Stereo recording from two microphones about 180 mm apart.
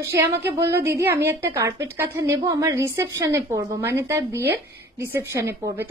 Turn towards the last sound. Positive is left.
turn(degrees=-15)  # may be behind; listen again after turning